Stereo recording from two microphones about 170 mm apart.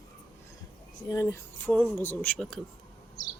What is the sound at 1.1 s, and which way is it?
Speech, 15° left (ahead or behind).